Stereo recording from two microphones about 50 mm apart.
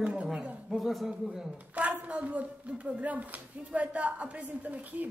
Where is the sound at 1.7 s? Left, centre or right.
Right.